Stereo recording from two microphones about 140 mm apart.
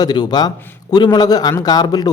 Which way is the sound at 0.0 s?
30° left (ahead or behind).